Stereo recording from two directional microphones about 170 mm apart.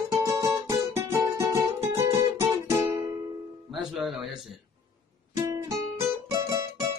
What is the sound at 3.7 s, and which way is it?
Music, centre (ahead or behind).